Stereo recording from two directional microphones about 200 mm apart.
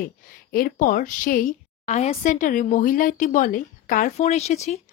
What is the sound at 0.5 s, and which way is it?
Speech, 45° left (ahead or behind).